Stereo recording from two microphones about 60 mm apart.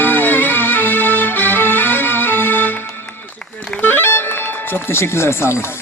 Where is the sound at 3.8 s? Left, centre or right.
Left.